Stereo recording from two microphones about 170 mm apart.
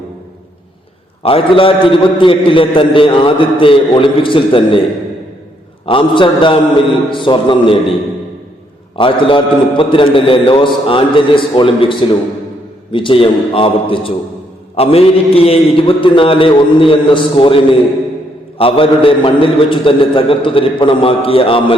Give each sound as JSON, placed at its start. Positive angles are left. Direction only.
{"t": 1.2, "sound": "a man's voice", "side_deg": 35}
{"t": 5.8, "sound": "a man's voice", "side_deg": 30}
{"t": 9.0, "sound": "a man's voice", "side_deg": 30}